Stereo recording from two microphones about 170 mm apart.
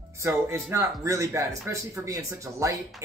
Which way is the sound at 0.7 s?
20° right (ahead or behind).